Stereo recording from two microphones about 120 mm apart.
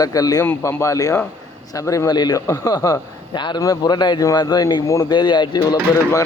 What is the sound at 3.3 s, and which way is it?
A man's voice, 40° left (ahead or behind).